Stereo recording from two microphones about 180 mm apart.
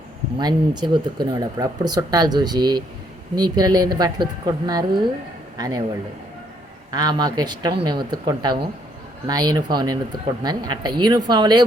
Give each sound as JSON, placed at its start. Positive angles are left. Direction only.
{"t": 0.3, "sound": "speech", "side_deg": -25}
{"t": 6.9, "sound": "speech", "side_deg": -25}